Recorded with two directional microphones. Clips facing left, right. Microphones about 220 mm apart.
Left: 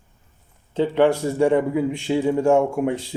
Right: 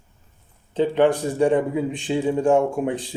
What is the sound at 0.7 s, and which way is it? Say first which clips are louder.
Speech: even; 15° right (ahead or behind).